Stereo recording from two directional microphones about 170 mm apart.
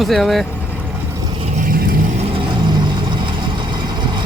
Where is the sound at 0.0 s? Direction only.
Centre (ahead or behind).